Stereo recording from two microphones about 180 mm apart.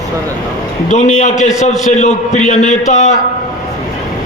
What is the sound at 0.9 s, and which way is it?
A man's voice, 40° left (ahead or behind).